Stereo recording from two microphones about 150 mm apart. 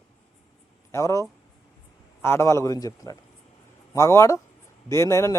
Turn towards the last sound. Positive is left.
turn(degrees=20)  # may be behind; listen again after turning